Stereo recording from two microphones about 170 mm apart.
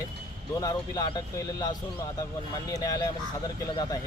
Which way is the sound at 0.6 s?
20° left (ahead or behind).